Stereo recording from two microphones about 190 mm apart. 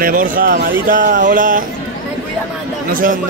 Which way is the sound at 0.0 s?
45° right (ahead or behind).